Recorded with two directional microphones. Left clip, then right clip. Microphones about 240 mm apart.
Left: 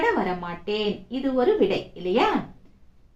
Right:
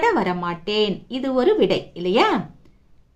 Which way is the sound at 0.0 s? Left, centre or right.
Right.